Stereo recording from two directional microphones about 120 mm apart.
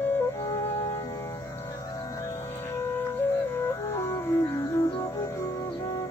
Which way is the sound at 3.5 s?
25° left (ahead or behind).